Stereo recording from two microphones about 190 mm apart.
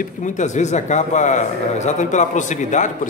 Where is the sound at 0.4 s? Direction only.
35° left (ahead or behind).